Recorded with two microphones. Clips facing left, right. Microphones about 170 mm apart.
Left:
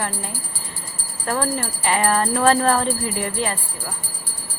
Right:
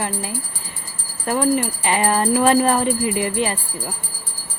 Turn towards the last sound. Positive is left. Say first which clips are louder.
# right 4 dB
turn(degrees=-20)  # may be behind; listen again after turning